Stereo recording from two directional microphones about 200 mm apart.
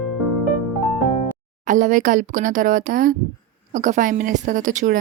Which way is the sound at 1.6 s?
40° right (ahead or behind).